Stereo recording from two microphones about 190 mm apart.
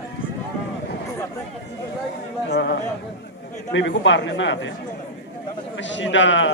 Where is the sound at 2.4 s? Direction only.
60° left (ahead or behind).